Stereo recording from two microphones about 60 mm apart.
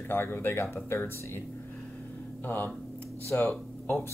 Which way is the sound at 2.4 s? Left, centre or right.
Left.